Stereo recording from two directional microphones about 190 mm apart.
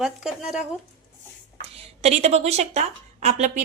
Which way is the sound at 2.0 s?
35° right (ahead or behind).